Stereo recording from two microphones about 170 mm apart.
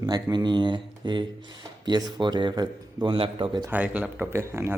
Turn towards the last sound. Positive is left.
turn(degrees=-15)  # may be behind; listen again after turning